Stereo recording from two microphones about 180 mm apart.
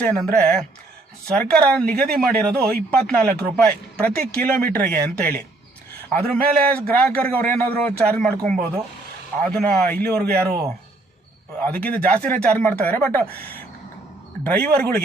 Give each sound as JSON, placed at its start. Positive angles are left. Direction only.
{"t": 0.0, "sound": "a man's voice", "side_deg": 5}
{"t": 11.6, "sound": "a man's voice", "side_deg": 10}